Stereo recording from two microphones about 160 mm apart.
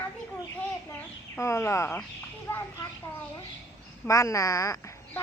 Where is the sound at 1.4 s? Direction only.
15° left (ahead or behind).